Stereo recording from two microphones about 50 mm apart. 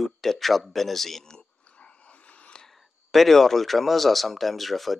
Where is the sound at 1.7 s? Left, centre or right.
Left.